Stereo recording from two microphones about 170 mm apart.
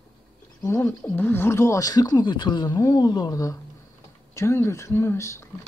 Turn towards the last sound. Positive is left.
turn(degrees=15)  # may be behind; listen again after turning